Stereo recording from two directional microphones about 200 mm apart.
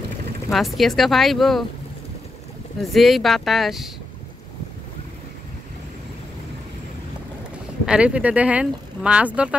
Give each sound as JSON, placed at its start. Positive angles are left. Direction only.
{"t": 0.5, "sound": "speech", "side_deg": 0}
{"t": 2.8, "sound": "speech", "side_deg": 0}
{"t": 7.8, "sound": "speech", "side_deg": -5}